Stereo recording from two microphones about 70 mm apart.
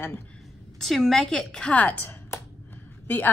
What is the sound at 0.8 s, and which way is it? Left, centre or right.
Speech, centre.